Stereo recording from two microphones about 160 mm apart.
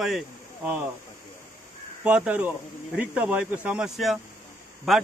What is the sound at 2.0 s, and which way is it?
A man's voice, 5° right (ahead or behind).